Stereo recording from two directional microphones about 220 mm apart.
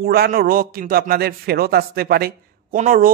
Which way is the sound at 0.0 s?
45° right (ahead or behind).